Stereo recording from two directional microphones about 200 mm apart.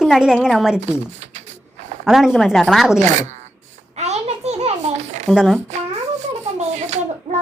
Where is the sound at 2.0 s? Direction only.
5° right (ahead or behind).